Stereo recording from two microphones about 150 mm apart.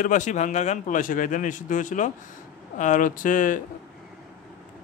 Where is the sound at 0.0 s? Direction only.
55° left (ahead or behind).